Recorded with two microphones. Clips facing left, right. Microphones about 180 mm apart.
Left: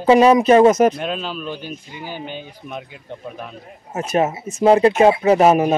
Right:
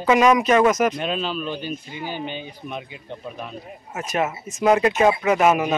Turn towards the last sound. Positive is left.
turn(degrees=35)  # may be behind; listen again after turning